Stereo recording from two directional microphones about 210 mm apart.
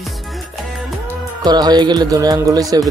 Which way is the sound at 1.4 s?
20° right (ahead or behind).